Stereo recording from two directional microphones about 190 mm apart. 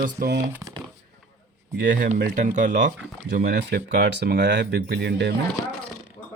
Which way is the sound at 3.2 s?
55° right (ahead or behind).